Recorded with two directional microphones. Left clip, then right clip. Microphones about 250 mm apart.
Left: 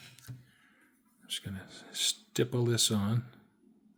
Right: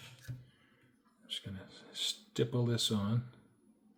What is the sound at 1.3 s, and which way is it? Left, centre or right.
Speech, left.